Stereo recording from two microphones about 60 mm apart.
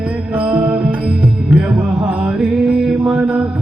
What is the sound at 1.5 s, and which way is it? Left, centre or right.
Mantra, centre.